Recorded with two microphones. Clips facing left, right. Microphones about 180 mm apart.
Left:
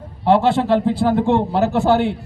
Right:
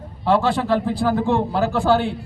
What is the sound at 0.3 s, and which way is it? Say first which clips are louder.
A man's voice: left 3 dB; 25° left (ahead or behind).